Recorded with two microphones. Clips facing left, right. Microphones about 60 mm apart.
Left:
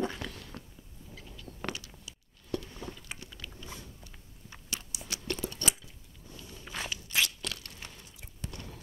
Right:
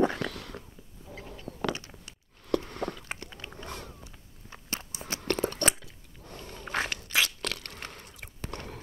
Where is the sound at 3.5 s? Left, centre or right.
Right.